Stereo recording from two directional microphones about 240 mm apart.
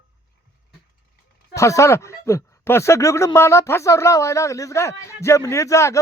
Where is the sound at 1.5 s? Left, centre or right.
Centre.